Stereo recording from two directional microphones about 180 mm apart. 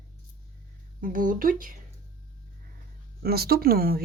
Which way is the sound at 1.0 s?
50° right (ahead or behind).